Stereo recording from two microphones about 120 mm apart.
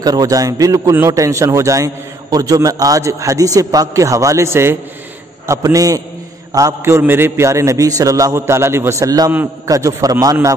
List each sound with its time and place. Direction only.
0.0 s a man's voice: 30° right (ahead or behind)